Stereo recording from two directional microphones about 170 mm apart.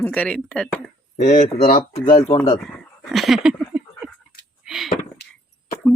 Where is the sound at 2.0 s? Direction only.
45° left (ahead or behind).